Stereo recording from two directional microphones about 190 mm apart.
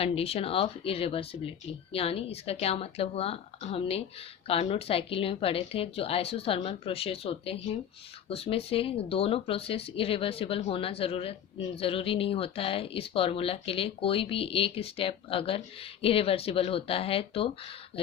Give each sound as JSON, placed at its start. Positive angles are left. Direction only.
{"t": 0.0, "sound": "a woman's voice", "side_deg": 30}